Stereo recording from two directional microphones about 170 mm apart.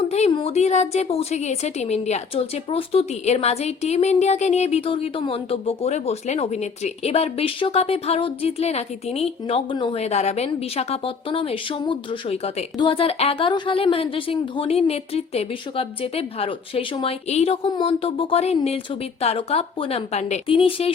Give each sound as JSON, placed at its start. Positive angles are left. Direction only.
{"t": 0.1, "sound": "a woman's voice", "side_deg": 40}